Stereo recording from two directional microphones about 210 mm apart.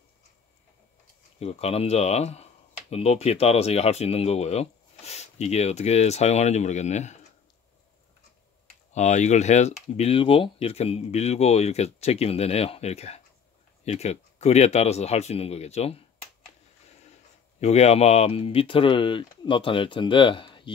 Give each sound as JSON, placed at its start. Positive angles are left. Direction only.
{"t": 1.4, "sound": "speech", "side_deg": 30}
{"t": 8.9, "sound": "speech", "side_deg": 35}
{"t": 17.6, "sound": "speech", "side_deg": 30}